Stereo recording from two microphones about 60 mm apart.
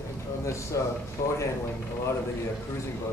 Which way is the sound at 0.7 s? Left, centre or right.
Left.